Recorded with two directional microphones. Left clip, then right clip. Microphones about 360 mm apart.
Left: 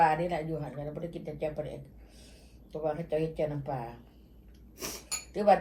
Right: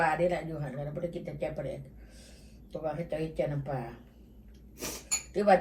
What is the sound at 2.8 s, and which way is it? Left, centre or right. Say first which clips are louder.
A woman's voice: left 3 dB; centre.